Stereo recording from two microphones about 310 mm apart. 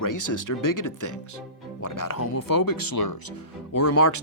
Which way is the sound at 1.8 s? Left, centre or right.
Left.